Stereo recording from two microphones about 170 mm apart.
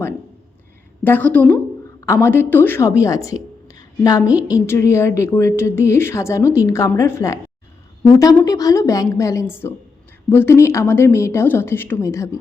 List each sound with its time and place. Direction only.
1.0 s a woman's voice: 10° left (ahead or behind)